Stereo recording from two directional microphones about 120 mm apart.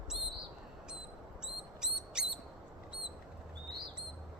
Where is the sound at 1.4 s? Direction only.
5° right (ahead or behind).